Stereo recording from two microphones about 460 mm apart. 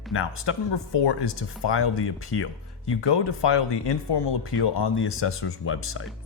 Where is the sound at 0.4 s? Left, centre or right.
Left.